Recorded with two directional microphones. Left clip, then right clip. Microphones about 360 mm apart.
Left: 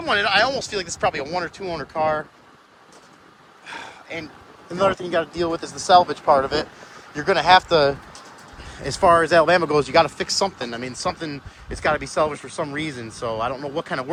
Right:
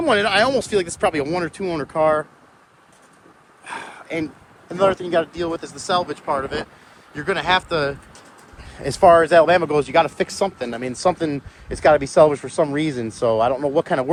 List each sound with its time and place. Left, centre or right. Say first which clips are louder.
0.0 s speech: right 2 dB; centre
3.7 s a sound: right 4 dB; centre
4.7 s speech: right 2 dB; centre
8.8 s speech: right 4 dB; centre